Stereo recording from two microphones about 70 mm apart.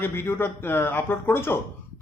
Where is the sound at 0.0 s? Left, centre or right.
Left.